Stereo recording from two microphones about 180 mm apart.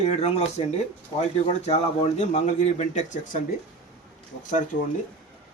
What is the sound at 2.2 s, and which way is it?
Speech, 40° left (ahead or behind).